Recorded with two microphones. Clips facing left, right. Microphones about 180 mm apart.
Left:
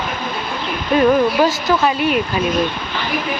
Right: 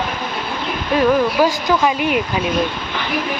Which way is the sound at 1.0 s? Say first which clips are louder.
Left 1 dB; 10° right (ahead or behind).